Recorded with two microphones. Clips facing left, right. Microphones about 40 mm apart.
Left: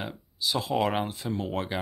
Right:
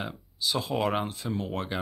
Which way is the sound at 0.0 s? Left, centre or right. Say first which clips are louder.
Even; centre.